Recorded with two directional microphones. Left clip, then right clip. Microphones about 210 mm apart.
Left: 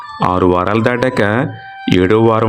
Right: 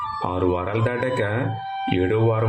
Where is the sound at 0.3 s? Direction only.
40° left (ahead or behind).